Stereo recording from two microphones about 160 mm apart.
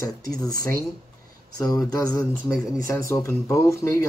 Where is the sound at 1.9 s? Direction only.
20° left (ahead or behind).